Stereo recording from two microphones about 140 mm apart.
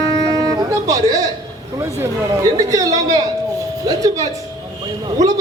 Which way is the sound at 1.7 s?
20° right (ahead or behind).